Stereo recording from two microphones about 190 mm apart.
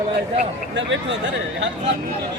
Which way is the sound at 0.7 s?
70° right (ahead or behind).